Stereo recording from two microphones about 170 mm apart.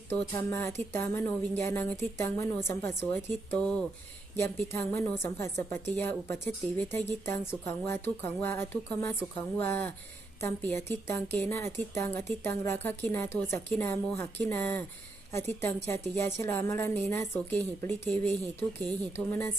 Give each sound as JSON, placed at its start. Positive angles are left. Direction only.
{"t": 0.1, "sound": "a woman's voice", "side_deg": 15}